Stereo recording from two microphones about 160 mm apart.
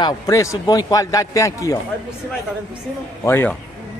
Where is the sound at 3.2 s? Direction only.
15° left (ahead or behind).